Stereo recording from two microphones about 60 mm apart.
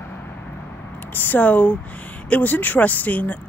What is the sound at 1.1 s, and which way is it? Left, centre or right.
Speech, left.